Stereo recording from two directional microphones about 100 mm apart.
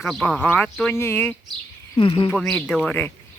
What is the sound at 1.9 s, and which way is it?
Speech, 55° left (ahead or behind).